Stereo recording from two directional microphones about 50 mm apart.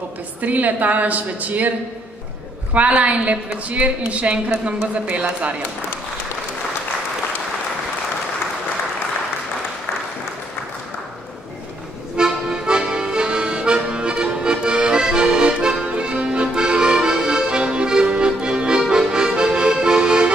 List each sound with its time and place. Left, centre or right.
0.4 s a woman's voice: right
2.7 s a woman's voice: right
12.2 s accordion: centre